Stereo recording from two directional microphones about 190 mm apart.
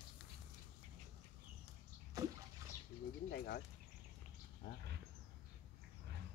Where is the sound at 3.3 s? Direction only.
55° left (ahead or behind).